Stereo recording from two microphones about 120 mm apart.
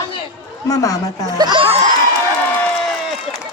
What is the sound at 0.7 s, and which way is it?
Speech, 30° left (ahead or behind).